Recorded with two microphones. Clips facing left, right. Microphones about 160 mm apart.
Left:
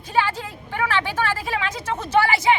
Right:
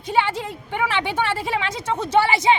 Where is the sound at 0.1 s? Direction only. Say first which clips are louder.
Right 1 dB; 20° right (ahead or behind).